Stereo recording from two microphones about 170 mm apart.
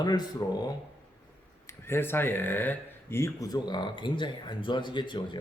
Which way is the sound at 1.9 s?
15° left (ahead or behind).